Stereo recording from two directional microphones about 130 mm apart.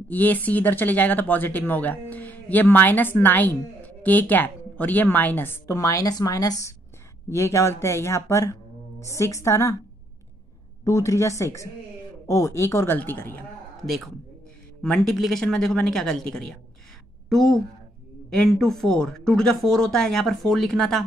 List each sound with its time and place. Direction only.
0.1 s speech: 15° left (ahead or behind)
10.8 s speech: 25° left (ahead or behind)
13.8 s speech: centre (ahead or behind)